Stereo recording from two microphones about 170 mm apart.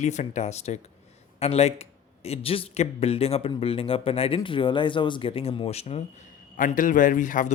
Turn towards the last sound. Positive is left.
turn(degrees=50)  # may be behind; listen again after turning